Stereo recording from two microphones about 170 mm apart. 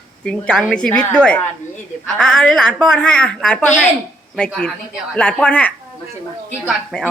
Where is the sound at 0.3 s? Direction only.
5° left (ahead or behind).